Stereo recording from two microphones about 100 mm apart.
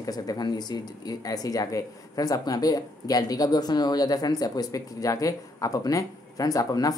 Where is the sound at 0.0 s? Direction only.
40° left (ahead or behind).